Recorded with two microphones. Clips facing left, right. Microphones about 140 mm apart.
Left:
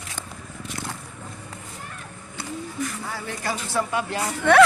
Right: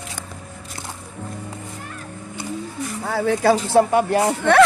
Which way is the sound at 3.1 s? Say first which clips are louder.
Right 13 dB; 70° right (ahead or behind).